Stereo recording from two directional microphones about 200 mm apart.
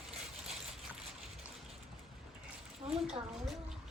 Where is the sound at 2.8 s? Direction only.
20° right (ahead or behind).